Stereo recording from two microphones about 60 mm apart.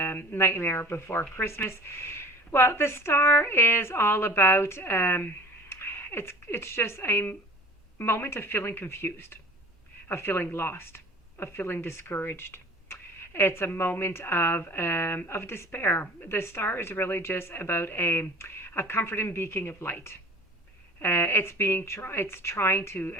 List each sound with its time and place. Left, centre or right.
0.0 s a woman's voice: left